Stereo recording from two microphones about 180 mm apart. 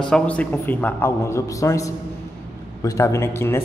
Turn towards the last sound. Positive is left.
turn(degrees=15)  # may be behind; listen again after turning